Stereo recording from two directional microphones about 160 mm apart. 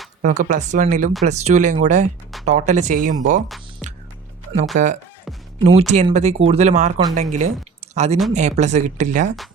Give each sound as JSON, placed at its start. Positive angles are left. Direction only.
{"t": 0.2, "sound": "speech", "side_deg": -50}
{"t": 4.7, "sound": "speech", "side_deg": -50}